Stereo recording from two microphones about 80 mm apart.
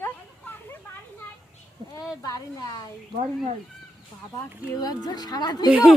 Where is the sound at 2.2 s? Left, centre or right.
Left.